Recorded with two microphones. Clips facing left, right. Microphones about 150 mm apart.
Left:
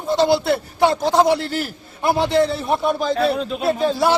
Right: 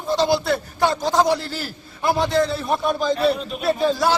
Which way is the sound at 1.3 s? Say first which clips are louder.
Left 4 dB; 60° left (ahead or behind).